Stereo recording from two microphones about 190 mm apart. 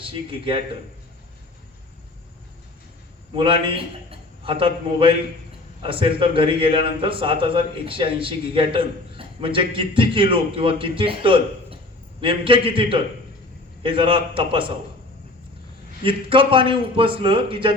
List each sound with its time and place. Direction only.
0.0 s a man's voice: 25° right (ahead or behind)
3.3 s a man's voice: 25° right (ahead or behind)
16.0 s a man's voice: 25° right (ahead or behind)